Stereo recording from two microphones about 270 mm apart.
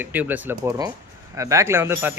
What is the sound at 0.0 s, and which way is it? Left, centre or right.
A man's voice, centre.